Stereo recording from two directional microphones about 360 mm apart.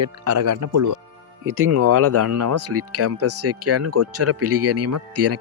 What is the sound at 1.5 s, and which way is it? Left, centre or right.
Speech, right.